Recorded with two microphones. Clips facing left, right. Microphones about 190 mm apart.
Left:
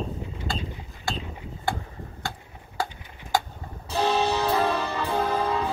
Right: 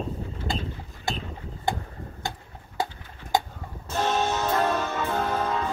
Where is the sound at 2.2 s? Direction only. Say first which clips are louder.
Right 1 dB; 20° right (ahead or behind).